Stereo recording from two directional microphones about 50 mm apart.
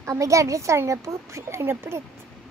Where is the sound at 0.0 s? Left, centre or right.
Right.